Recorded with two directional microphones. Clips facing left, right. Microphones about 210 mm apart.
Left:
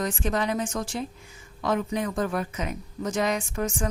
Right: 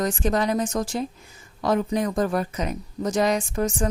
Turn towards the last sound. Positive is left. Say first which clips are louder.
# right 4 dB
turn(degrees=-35)  # may be behind; listen again after turning